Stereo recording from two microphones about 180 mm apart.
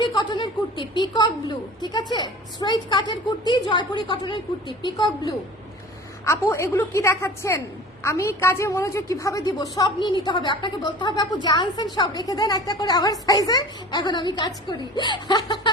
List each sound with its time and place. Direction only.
0.0 s a woman's voice: 25° left (ahead or behind)